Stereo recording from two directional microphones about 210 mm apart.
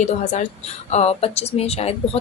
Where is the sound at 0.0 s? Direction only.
35° left (ahead or behind).